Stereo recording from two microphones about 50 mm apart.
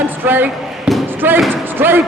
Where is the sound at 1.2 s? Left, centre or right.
Right.